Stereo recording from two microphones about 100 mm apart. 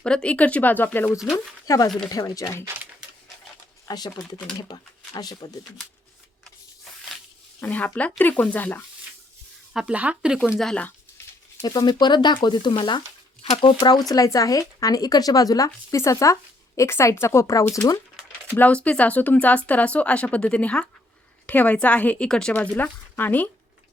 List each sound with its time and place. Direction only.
0.0 s speech: 10° left (ahead or behind)
1.2 s speech: centre (ahead or behind)
1.6 s speech: 35° left (ahead or behind)
3.8 s speech: 45° left (ahead or behind)
7.6 s speech: 15° left (ahead or behind)
9.7 s speech: 10° right (ahead or behind)
10.6 s speech: 5° left (ahead or behind)
11.6 s speech: 45° left (ahead or behind)
13.4 s speech: 60° left (ahead or behind)
13.7 s speech: 45° left (ahead or behind)
18.5 s speech: 15° left (ahead or behind)
22.7 s speech: 20° left (ahead or behind)